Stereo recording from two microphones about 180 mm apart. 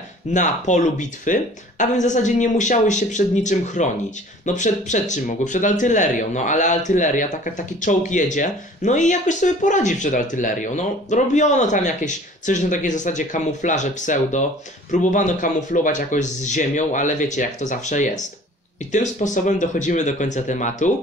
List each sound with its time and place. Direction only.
0.3 s speech: 45° left (ahead or behind)